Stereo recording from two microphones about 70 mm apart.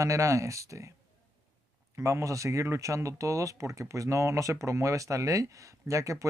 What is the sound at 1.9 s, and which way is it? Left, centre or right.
Speech, right.